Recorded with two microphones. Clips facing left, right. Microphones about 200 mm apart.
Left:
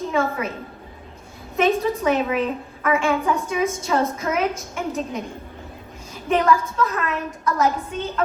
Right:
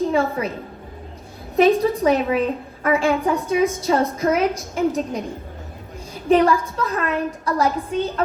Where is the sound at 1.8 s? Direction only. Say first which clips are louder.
Right 3 dB; 30° right (ahead or behind).